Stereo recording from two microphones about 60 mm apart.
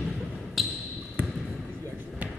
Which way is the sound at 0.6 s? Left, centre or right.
Centre.